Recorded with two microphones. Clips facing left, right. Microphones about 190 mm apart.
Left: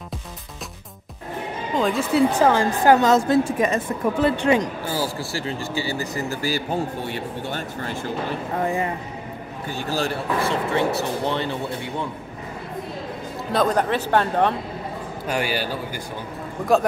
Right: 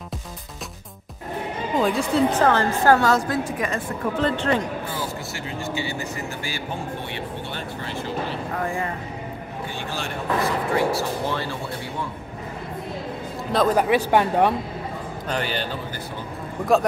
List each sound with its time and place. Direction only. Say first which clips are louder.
1.8 s speech: left 1 dB; centre (ahead or behind); by 3.8 s 25° left (ahead or behind)
4.2 s speech: left 3 dB; 10° left (ahead or behind)
4.9 s a man's voice: left 4 dB; 35° left (ahead or behind)
8.5 s speech: left 4 dB; 20° left (ahead or behind)
9.8 s speech: left 4 dB; 35° left (ahead or behind); by 11.5 s 20° left (ahead or behind)
13.5 s speech: right 2 dB; 5° right (ahead or behind)
15.2 s speech: left 2 dB; 10° left (ahead or behind)